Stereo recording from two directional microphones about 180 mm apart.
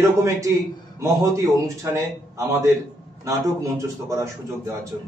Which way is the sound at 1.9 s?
15° right (ahead or behind).